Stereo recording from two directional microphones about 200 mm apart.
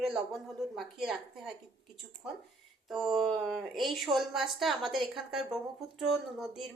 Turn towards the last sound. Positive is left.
turn(degrees=0)  # may be behind; listen again after turning